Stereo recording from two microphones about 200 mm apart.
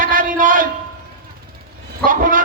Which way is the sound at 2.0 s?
45° right (ahead or behind).